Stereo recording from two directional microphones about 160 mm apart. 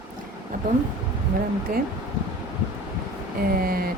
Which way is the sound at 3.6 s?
70° right (ahead or behind).